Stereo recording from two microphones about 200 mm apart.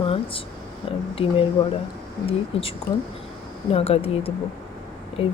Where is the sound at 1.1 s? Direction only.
30° left (ahead or behind).